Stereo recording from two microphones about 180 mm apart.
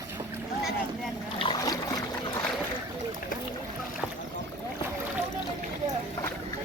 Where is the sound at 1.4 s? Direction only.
25° left (ahead or behind).